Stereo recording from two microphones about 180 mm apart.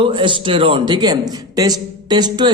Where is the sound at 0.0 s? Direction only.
25° right (ahead or behind).